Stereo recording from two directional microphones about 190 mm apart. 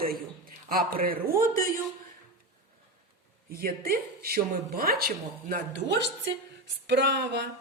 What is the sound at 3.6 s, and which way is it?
A woman's voice, 50° right (ahead or behind).